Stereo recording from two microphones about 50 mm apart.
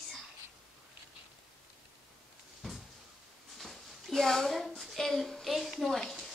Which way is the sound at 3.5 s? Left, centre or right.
Centre.